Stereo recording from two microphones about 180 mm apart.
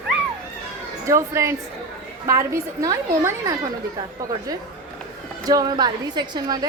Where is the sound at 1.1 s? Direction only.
15° right (ahead or behind).